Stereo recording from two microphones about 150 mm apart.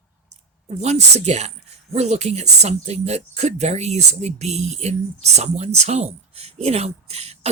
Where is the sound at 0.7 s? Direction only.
45° right (ahead or behind).